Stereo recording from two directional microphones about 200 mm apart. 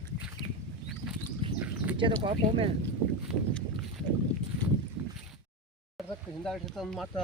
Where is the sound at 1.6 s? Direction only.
10° right (ahead or behind).